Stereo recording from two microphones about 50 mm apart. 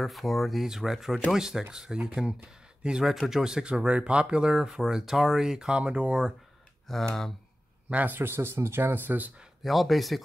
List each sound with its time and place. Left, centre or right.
0.0 s speech: centre
3.1 s speech: centre
6.9 s speech: centre
7.9 s a man's voice: right
8.2 s speech: right
9.6 s speech: centre